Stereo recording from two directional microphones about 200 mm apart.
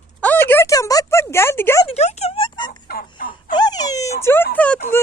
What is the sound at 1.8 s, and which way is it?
Music, 35° left (ahead or behind).